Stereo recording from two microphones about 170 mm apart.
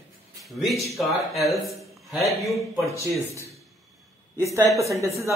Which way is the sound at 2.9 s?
15° right (ahead or behind).